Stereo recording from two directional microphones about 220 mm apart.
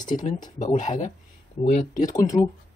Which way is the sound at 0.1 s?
35° left (ahead or behind).